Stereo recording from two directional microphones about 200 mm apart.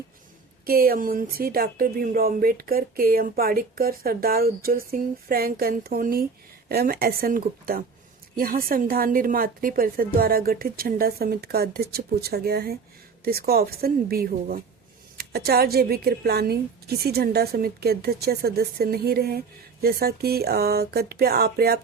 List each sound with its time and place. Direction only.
0.6 s speech: 50° right (ahead or behind)